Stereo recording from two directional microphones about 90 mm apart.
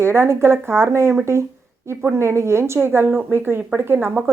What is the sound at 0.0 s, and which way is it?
Speech, 30° right (ahead or behind).